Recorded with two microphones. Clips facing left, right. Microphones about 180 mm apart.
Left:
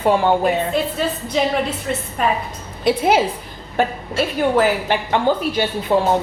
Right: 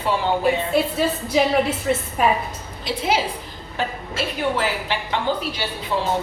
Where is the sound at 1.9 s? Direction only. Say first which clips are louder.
Right 2 dB; 5° right (ahead or behind).